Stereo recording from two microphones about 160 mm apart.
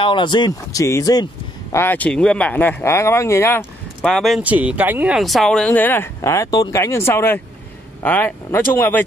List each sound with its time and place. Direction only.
0.0 s speech: 30° left (ahead or behind)
4.0 s speech: centre (ahead or behind)
4.4 s speech: 10° right (ahead or behind); by 9.0 s 15° left (ahead or behind)